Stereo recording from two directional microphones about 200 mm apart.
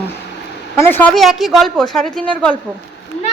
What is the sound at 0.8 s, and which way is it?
A woman's voice, 10° left (ahead or behind).